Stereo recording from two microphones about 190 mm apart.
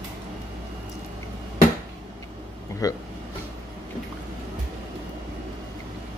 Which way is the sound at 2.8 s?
20° left (ahead or behind).